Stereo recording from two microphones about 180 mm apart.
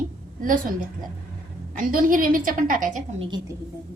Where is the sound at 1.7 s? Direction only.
50° right (ahead or behind).